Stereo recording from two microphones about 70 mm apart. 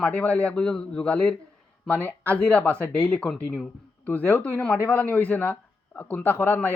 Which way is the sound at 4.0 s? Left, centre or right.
Left.